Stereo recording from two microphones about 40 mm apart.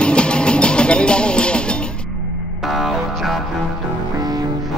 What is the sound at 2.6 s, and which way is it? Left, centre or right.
Music, centre.